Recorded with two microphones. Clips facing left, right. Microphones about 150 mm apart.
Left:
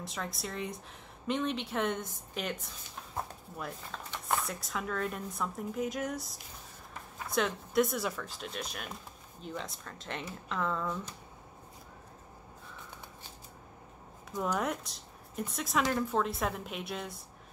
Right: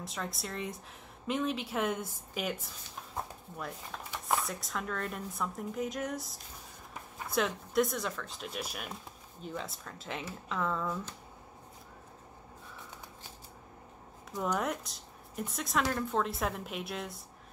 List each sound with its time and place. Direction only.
0.0 s speech: centre (ahead or behind)
4.1 s speech: centre (ahead or behind)
14.5 s speech: centre (ahead or behind)